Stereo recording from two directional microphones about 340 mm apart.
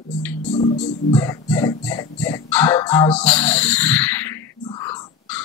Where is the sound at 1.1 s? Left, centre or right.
Centre.